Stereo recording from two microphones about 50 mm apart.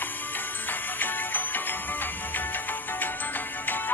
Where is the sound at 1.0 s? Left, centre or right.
Left.